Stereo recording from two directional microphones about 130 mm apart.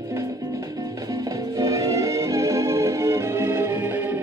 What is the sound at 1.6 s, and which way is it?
Music, 25° right (ahead or behind).